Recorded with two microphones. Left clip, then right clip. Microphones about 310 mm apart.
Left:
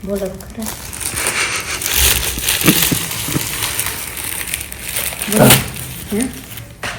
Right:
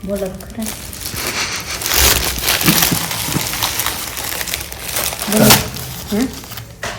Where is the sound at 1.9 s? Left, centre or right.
Right.